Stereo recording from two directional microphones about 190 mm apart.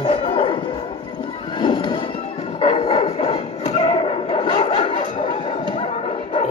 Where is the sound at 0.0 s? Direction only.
35° left (ahead or behind).